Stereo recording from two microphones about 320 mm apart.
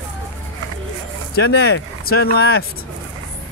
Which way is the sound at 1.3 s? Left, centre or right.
Left.